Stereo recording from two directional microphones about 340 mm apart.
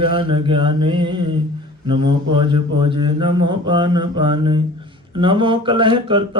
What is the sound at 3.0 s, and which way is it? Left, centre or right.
Mantra, centre.